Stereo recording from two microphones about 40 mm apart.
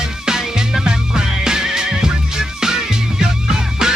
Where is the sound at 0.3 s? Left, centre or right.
Centre.